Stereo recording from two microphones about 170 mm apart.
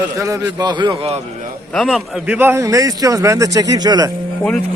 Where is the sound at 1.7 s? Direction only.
Centre (ahead or behind); by 4.1 s 25° right (ahead or behind).